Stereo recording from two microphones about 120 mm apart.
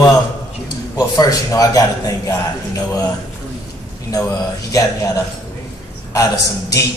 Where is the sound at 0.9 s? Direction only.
30° left (ahead or behind).